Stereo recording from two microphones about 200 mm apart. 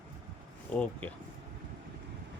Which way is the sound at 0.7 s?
5° left (ahead or behind).